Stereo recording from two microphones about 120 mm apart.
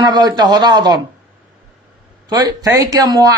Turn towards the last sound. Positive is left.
turn(degrees=-35)  # may be behind; listen again after turning